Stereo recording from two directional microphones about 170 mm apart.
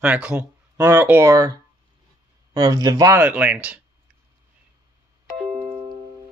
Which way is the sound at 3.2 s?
10° right (ahead or behind).